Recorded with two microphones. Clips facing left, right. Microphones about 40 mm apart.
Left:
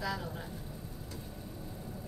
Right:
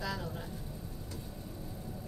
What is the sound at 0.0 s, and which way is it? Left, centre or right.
Vehicle, centre.